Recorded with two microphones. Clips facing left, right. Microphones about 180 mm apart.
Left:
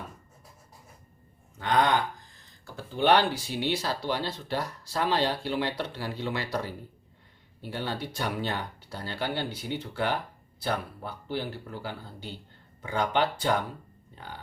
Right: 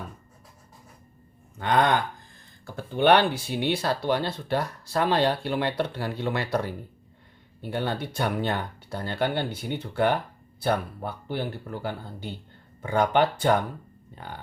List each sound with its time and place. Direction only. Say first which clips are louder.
1.5 s speech: right 2 dB; 55° right (ahead or behind)